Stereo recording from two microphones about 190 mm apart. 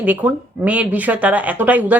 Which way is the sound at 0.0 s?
10° right (ahead or behind).